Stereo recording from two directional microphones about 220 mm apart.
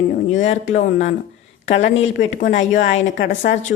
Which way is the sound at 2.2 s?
30° left (ahead or behind).